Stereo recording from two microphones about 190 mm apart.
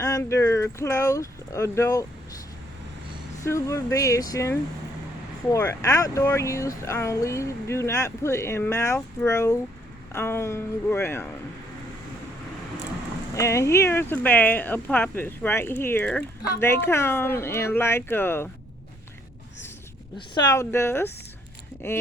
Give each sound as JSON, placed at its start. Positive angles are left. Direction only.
{"t": 0.0, "sound": "speech", "side_deg": 15}
{"t": 3.4, "sound": "speech", "side_deg": 15}
{"t": 13.3, "sound": "speech", "side_deg": 15}
{"t": 20.1, "sound": "speech", "side_deg": 20}